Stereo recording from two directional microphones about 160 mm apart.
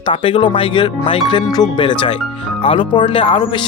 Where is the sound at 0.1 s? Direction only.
35° left (ahead or behind).